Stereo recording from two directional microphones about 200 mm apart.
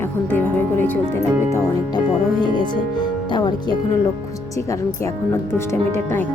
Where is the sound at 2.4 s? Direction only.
20° left (ahead or behind).